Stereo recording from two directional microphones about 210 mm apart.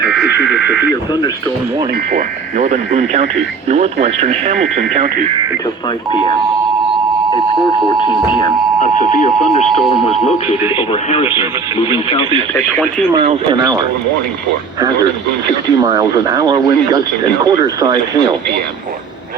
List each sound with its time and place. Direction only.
0.0 s buzzer: 5° right (ahead or behind)
2.1 s speech: 40° right (ahead or behind)
9.6 s speech: centre (ahead or behind)
10.8 s speech: 30° left (ahead or behind)
13.1 s speech: 25° right (ahead or behind)
15.7 s speech: 20° right (ahead or behind)